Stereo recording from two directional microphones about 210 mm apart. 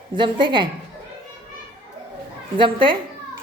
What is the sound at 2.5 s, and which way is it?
Speech, 25° right (ahead or behind).